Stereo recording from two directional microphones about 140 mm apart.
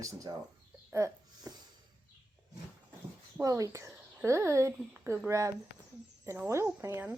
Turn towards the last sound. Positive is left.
turn(degrees=-15)  # may be behind; listen again after turning